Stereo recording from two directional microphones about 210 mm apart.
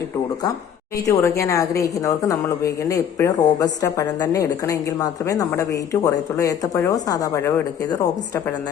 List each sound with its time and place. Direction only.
1.0 s a woman's voice: 15° left (ahead or behind)